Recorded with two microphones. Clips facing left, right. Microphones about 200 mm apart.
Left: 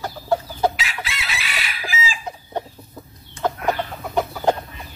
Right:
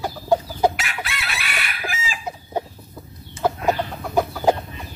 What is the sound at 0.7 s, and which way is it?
Chicken, 55° right (ahead or behind).